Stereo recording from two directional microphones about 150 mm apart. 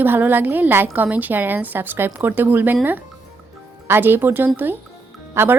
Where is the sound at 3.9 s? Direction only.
15° right (ahead or behind).